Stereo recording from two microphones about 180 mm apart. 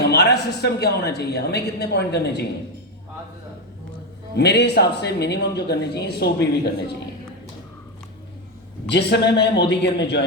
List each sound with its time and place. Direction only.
0.0 s a woman's voice: 65° left (ahead or behind)
4.4 s speech: 70° left (ahead or behind)
8.9 s speech: 70° left (ahead or behind)